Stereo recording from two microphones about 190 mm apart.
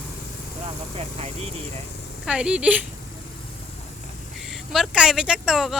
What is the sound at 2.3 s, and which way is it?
Speech, 5° right (ahead or behind).